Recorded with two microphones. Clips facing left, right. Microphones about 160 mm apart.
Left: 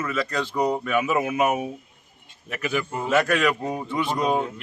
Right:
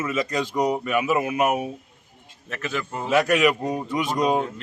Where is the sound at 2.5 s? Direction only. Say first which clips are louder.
Left 3 dB; 15° left (ahead or behind).